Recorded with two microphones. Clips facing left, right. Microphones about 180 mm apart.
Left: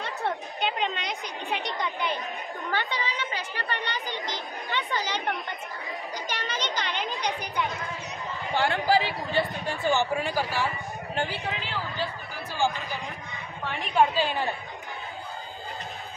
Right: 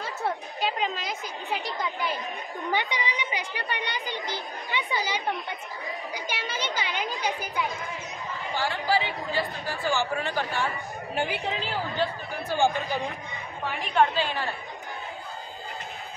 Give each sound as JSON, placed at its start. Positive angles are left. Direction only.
{"t": 0.0, "sound": "a woman's voice", "side_deg": 0}
{"t": 2.7, "sound": "a woman's voice", "side_deg": -15}
{"t": 8.5, "sound": "a man's voice", "side_deg": 50}
{"t": 9.3, "sound": "speech", "side_deg": 25}
{"t": 11.1, "sound": "a woman's voice", "side_deg": -15}
{"t": 12.0, "sound": "a sound", "side_deg": -55}
{"t": 13.9, "sound": "speech", "side_deg": 15}